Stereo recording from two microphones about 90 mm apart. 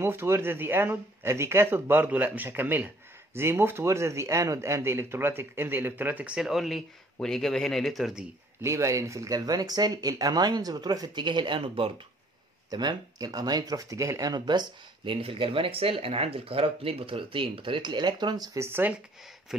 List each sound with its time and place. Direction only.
0.0 s speech: 25° right (ahead or behind); by 8.3 s 5° right (ahead or behind)
8.6 s speech: 35° right (ahead or behind); by 11.9 s 80° right
12.6 s speech: 50° right (ahead or behind)
15.2 s speech: 90° right; by 18.6 s 45° right (ahead or behind)
18.6 s speech: 25° right (ahead or behind)